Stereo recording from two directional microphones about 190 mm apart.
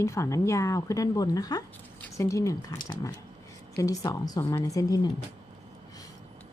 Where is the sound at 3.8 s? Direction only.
20° left (ahead or behind).